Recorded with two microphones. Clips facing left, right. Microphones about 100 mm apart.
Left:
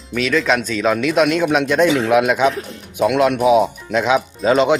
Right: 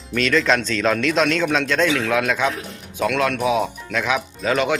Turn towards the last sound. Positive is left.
turn(degrees=25)  # may be behind; listen again after turning